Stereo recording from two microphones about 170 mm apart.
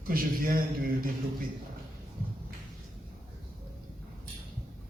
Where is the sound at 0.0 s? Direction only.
60° right (ahead or behind).